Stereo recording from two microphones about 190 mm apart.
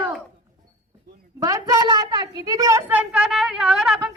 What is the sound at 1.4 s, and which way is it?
A woman's voice, 15° right (ahead or behind).